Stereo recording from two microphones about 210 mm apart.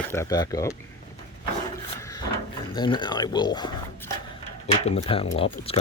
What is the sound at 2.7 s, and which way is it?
Speech, 20° left (ahead or behind).